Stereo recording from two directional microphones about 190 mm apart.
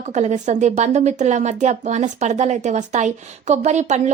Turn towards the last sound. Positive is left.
turn(degrees=-40)  # may be behind; listen again after turning